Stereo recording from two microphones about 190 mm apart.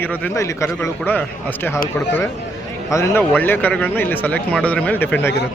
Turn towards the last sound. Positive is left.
turn(degrees=10)  # may be behind; listen again after turning